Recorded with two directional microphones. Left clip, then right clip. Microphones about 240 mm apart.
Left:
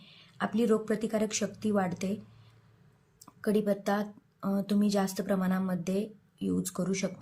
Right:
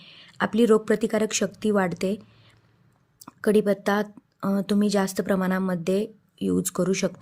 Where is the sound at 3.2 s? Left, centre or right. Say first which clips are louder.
Right 9 dB; right.